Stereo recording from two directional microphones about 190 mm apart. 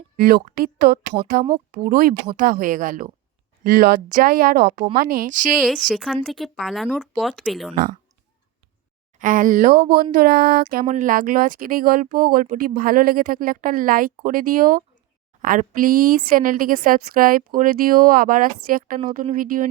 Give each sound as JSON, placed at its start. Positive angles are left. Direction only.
{"t": 0.2, "sound": "speech", "side_deg": -50}
{"t": 5.5, "sound": "speech", "side_deg": 0}
{"t": 9.1, "sound": "speech", "side_deg": -45}